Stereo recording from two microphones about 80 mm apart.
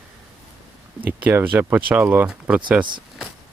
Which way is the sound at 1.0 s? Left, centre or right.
Right.